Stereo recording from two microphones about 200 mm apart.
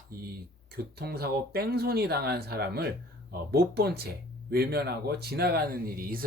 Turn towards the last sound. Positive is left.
turn(degrees=-45)  # may be behind; listen again after turning